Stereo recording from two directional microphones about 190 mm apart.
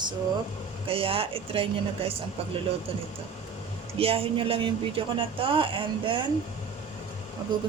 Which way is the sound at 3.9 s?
30° right (ahead or behind).